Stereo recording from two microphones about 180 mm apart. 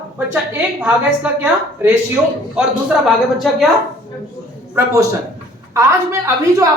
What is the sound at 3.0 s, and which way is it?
Speech, centre (ahead or behind).